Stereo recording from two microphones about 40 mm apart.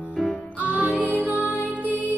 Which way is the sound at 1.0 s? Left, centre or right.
Left.